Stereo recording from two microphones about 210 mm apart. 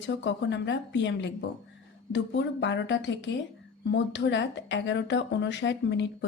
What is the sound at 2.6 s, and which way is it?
A woman's voice, 60° left (ahead or behind).